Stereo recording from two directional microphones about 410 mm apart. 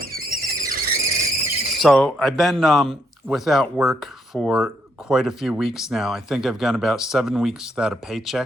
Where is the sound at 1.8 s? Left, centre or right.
Centre.